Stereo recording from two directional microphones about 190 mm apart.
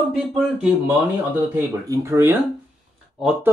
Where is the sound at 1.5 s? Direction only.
15° right (ahead or behind).